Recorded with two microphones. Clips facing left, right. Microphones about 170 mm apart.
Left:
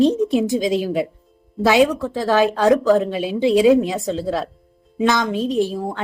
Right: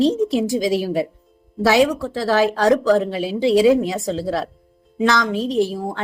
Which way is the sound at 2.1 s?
15° left (ahead or behind).